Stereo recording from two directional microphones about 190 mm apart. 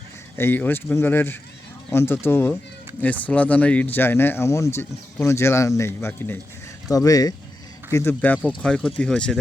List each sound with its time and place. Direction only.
0.3 s speech: 10° left (ahead or behind)